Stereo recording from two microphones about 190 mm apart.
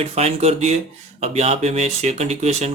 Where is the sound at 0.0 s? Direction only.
35° right (ahead or behind).